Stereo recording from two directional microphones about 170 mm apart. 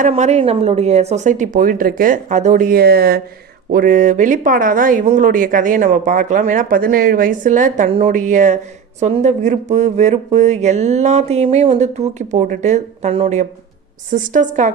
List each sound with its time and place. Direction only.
0.1 s speech: 40° right (ahead or behind)
7.9 s a woman's voice: 35° right (ahead or behind)
8.1 s speech: 50° right (ahead or behind)
14.1 s speech: 50° right (ahead or behind)